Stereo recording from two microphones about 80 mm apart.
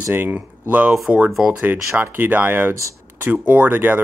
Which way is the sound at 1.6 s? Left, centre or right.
Right.